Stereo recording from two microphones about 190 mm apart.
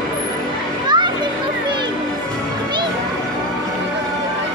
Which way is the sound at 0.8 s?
25° right (ahead or behind).